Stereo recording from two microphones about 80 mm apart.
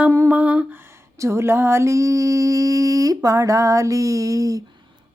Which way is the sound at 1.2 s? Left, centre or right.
Right.